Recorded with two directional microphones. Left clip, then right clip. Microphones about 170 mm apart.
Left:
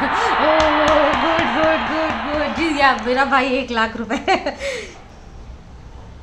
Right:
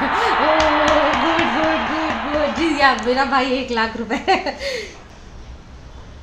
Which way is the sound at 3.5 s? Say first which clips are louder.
Left 1 dB; 15° right (ahead or behind).